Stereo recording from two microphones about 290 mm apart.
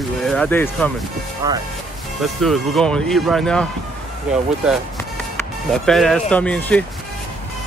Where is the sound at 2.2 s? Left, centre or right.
Centre.